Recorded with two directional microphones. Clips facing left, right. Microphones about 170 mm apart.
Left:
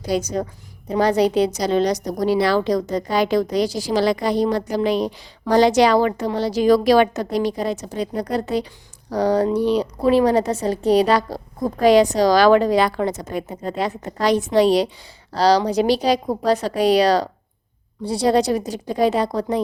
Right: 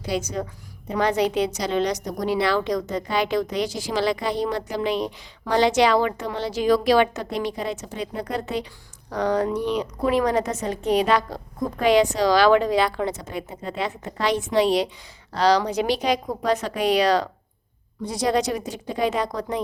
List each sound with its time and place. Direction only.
0.0 s a woman's voice: 40° left (ahead or behind)